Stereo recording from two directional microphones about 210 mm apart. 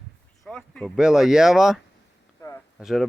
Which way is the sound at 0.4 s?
5° left (ahead or behind).